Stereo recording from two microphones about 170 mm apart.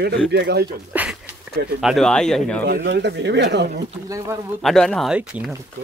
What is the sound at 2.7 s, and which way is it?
Speech, 90° right.